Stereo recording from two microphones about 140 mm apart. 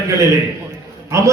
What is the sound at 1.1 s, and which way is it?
Speech, 20° right (ahead or behind).